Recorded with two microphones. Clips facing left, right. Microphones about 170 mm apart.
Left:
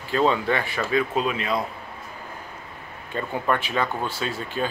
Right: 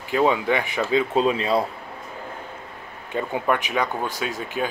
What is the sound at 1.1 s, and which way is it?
Speech, 30° right (ahead or behind).